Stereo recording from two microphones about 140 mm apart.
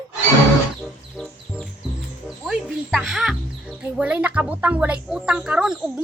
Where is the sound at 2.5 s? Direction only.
5° right (ahead or behind).